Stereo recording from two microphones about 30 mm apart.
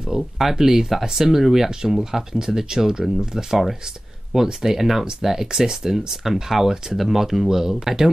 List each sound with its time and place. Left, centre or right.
0.1 s speech: centre
2.3 s speech: centre